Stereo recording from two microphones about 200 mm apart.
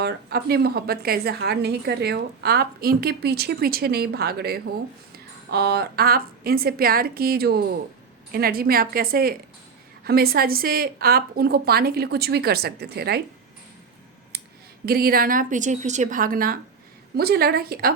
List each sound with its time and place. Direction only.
0.0 s a woman's voice: 55° right (ahead or behind)
14.8 s a woman's voice: 50° right (ahead or behind)